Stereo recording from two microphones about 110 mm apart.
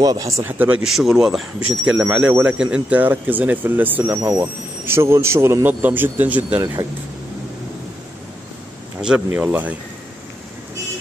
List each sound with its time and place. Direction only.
0.0 s speech: 35° right (ahead or behind)
0.4 s speech: 15° right (ahead or behind)
0.8 s speech: 5° right (ahead or behind)
9.0 s speech: 10° right (ahead or behind)